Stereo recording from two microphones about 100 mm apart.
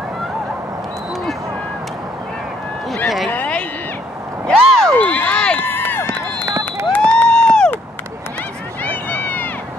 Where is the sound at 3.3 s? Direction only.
15° left (ahead or behind).